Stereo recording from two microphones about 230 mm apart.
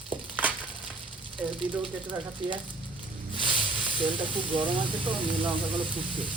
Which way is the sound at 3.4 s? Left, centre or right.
Right.